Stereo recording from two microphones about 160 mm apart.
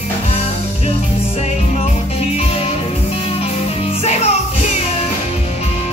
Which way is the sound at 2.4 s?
40° left (ahead or behind).